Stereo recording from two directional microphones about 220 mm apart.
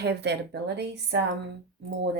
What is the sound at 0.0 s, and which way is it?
Speech, 50° right (ahead or behind).